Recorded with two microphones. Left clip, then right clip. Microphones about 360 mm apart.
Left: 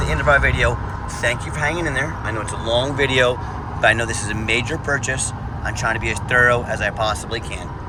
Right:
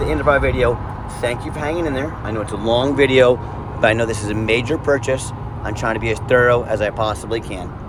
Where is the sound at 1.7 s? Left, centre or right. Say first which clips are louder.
Right 1 dB; centre.